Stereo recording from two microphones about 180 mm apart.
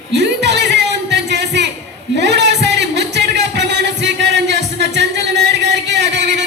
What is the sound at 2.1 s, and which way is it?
Music, 70° right (ahead or behind).